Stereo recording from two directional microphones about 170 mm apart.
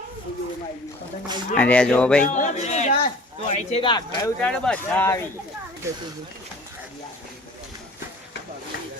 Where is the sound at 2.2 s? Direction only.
45° left (ahead or behind).